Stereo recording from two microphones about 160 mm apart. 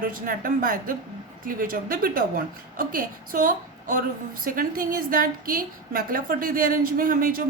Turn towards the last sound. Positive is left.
turn(degrees=-60)  # may be behind; listen again after turning